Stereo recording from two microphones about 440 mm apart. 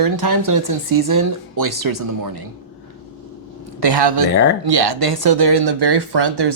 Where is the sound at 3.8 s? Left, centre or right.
Right.